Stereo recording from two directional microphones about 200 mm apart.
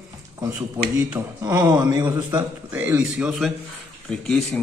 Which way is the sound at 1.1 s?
20° right (ahead or behind).